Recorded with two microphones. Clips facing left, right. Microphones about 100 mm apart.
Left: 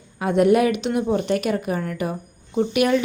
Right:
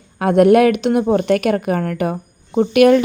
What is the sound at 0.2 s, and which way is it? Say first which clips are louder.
Speech: right 6 dB; 60° right (ahead or behind).